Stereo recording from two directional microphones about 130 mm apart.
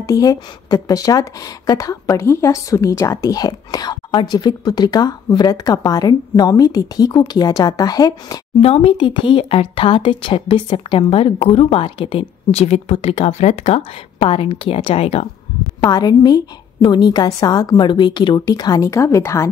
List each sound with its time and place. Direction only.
0.0 s speech: 25° left (ahead or behind)
8.5 s speech: 50° left (ahead or behind)
15.8 s a woman's voice: 30° left (ahead or behind)